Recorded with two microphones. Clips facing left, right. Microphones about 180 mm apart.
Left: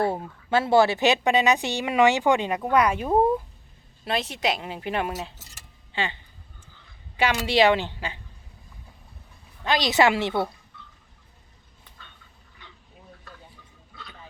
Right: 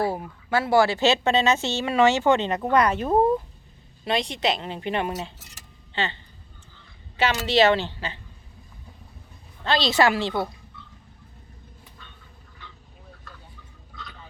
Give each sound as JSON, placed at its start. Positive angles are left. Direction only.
{"t": 0.1, "sound": "speech", "side_deg": 25}
{"t": 7.2, "sound": "speech", "side_deg": 10}
{"t": 9.6, "sound": "speech", "side_deg": 15}